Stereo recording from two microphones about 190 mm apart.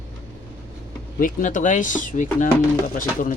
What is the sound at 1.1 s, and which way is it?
Speech, 45° left (ahead or behind).